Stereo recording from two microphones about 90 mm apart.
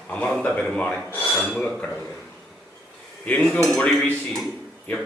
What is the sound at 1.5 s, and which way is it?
Dishes, 10° left (ahead or behind).